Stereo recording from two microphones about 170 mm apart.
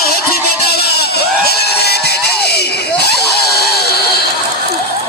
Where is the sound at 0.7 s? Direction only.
70° left (ahead or behind).